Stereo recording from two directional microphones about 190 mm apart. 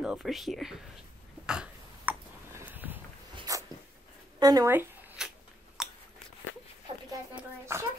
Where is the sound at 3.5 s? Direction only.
20° right (ahead or behind).